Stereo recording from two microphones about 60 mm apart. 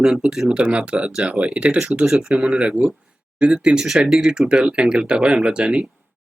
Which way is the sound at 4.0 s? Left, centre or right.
Centre.